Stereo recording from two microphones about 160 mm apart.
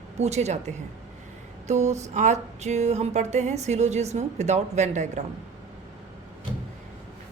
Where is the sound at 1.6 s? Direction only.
45° right (ahead or behind).